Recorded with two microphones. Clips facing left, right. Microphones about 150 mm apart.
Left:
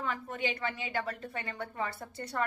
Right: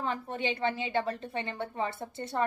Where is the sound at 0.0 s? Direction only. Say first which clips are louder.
Right 2 dB; 30° right (ahead or behind).